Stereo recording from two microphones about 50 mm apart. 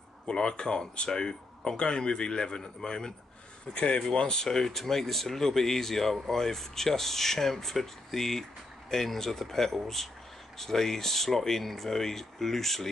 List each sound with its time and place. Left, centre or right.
0.3 s speech: centre
3.7 s speech: left; by 12.9 s centre